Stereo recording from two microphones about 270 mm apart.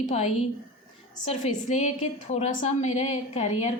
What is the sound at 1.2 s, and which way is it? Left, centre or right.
A woman's voice, left.